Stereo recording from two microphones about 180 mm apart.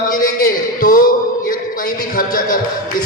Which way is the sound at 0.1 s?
50° left (ahead or behind).